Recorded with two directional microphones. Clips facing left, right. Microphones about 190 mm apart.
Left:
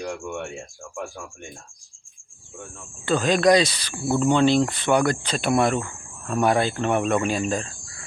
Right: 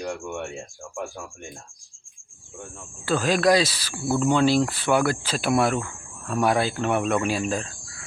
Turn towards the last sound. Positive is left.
turn(degrees=-5)  # may be behind; listen again after turning